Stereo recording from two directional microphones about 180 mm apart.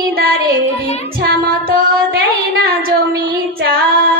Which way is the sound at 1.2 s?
55° right (ahead or behind).